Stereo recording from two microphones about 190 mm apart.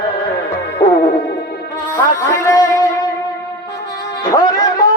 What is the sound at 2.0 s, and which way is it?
Music, 15° left (ahead or behind).